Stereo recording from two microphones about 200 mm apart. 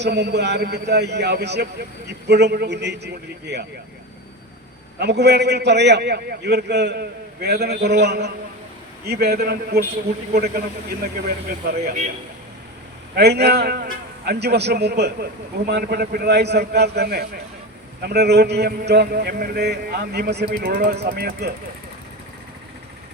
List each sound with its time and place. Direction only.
0.0 s a man's voice: 55° right (ahead or behind)
4.9 s a man's voice: 55° right (ahead or behind)
13.1 s a man's voice: 55° right (ahead or behind)